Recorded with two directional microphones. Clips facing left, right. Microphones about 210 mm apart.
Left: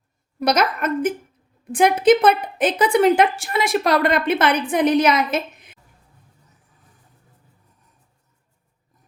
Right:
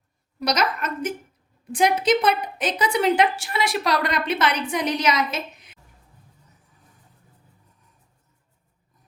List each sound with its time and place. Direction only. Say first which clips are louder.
0.3 s a woman's voice: left 4 dB; 55° left (ahead or behind)